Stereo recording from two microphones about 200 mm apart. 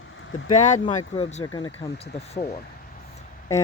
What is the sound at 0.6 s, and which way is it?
Speech, 40° left (ahead or behind).